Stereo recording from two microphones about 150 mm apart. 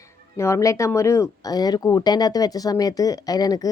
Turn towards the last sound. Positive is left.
turn(degrees=25)  # may be behind; listen again after turning